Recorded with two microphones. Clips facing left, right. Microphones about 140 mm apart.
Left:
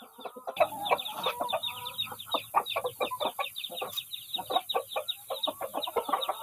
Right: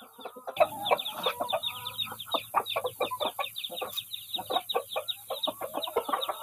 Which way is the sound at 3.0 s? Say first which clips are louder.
Even; 30° left (ahead or behind).